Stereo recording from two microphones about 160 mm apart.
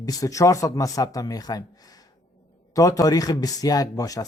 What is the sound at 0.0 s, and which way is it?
Speech, 20° left (ahead or behind).